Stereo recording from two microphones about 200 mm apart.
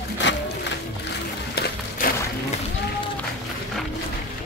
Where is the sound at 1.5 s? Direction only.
50° left (ahead or behind).